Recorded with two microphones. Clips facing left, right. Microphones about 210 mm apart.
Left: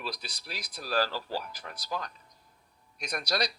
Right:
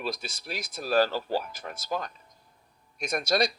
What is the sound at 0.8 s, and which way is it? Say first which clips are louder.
Speech: right 6 dB; 25° right (ahead or behind).